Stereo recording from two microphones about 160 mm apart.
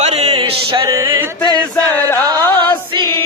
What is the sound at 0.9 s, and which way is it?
Music, 25° right (ahead or behind).